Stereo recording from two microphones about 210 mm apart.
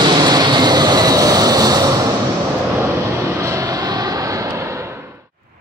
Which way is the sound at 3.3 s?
15° right (ahead or behind).